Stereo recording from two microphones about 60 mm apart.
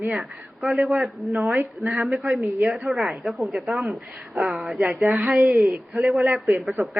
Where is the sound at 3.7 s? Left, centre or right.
Centre.